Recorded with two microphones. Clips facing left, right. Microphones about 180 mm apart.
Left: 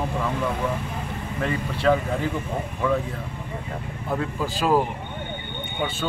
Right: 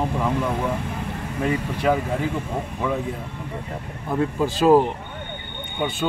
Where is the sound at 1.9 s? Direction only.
10° right (ahead or behind).